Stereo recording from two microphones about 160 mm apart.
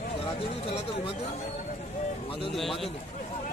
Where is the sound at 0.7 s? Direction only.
35° left (ahead or behind).